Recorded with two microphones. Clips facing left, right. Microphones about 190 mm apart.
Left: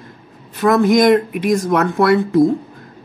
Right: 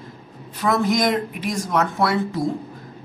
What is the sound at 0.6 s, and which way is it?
Speech, 55° left (ahead or behind).